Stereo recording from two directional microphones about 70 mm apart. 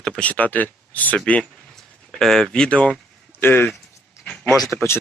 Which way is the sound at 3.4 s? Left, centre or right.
Left.